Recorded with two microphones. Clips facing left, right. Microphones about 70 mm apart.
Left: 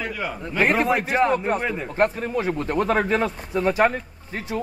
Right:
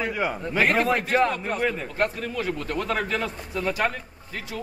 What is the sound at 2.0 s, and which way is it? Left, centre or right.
Speech, left.